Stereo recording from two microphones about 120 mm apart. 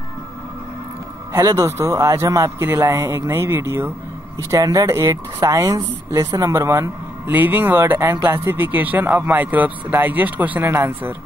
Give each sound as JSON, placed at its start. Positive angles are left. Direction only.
{"t": 1.3, "sound": "a man's voice", "side_deg": -30}